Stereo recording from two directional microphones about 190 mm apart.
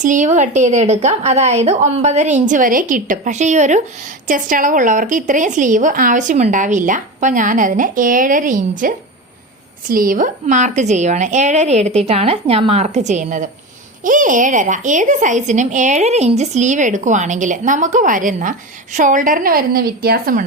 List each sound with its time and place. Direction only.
0.0 s a woman's voice: 40° right (ahead or behind)
9.9 s a woman's voice: 45° right (ahead or behind)